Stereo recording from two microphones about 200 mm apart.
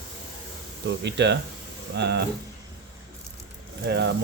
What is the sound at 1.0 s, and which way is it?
Mantra, 60° right (ahead or behind).